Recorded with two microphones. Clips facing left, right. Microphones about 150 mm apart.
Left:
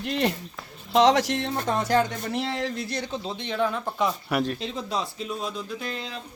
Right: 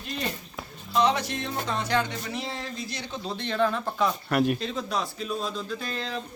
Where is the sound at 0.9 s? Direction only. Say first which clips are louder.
Left 5 dB; 90° left.